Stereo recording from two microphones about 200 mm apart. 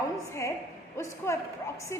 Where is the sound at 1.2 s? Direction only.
15° left (ahead or behind).